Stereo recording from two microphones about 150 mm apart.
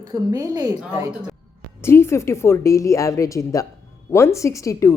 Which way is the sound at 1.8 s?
15° left (ahead or behind).